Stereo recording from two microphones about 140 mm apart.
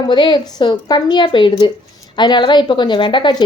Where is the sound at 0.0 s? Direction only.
35° left (ahead or behind).